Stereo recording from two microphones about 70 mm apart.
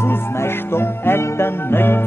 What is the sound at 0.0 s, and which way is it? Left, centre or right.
Music, left.